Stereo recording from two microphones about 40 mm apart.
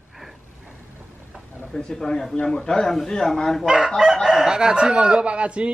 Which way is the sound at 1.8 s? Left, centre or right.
Centre.